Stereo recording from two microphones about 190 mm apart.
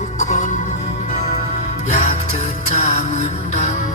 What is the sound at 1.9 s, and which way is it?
Music, 40° left (ahead or behind).